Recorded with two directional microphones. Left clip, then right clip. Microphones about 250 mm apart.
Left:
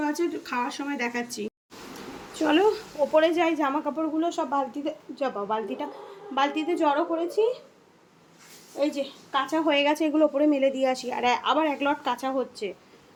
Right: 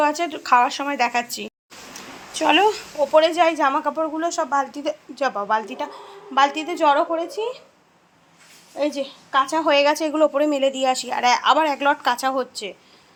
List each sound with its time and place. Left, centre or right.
0.0 s a woman's voice: centre
2.4 s speech: centre
7.1 s a woman's voice: right
8.8 s a woman's voice: right
9.6 s a woman's voice: centre